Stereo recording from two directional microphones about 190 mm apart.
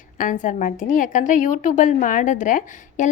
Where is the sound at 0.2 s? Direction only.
45° left (ahead or behind).